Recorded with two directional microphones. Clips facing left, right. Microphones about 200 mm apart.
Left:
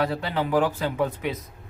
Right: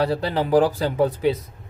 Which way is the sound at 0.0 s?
35° right (ahead or behind).